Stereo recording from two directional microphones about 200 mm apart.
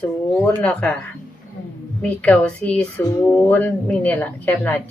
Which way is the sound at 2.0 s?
5° left (ahead or behind).